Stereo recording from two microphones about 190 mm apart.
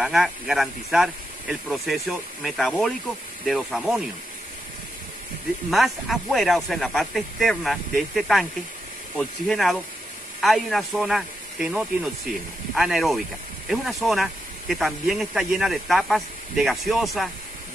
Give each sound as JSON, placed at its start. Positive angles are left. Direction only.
{"t": 0.0, "sound": "speech", "side_deg": 0}
{"t": 5.7, "sound": "speech", "side_deg": 0}